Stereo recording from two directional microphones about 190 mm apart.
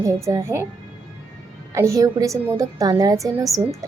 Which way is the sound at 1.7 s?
15° right (ahead or behind).